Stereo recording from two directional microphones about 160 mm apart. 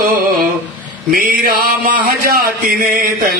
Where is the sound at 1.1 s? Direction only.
65° right (ahead or behind).